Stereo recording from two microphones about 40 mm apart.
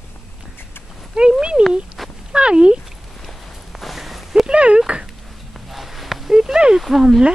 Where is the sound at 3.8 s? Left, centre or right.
Centre.